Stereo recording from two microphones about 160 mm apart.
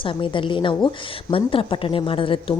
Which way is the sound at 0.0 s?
30° left (ahead or behind).